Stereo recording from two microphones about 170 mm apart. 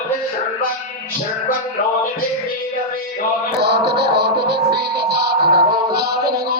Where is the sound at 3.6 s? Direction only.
75° right (ahead or behind).